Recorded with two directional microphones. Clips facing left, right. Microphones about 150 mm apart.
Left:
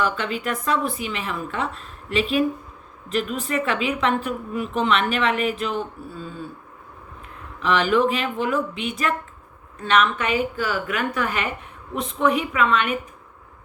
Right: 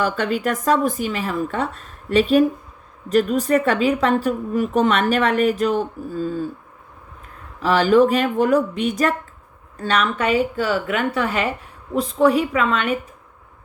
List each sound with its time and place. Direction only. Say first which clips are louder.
0.0 s speech: right 4 dB; 45° right (ahead or behind)
7.6 s speech: right 5 dB; 35° right (ahead or behind)